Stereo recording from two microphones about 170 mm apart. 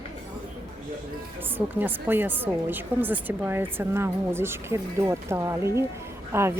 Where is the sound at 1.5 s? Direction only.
10° right (ahead or behind).